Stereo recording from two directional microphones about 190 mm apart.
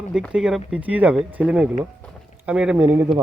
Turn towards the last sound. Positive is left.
turn(degrees=-10)  # may be behind; listen again after turning